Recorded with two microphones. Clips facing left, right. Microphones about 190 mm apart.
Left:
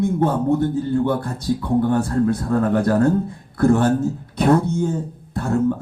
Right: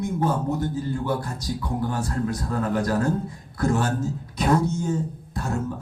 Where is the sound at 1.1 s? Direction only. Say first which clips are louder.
Left 6 dB; 60° left (ahead or behind).